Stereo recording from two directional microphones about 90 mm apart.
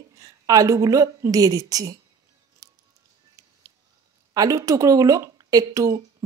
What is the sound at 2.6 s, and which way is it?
Music, 40° right (ahead or behind).